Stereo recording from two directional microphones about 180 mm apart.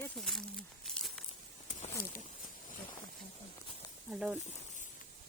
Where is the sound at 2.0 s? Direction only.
55° left (ahead or behind).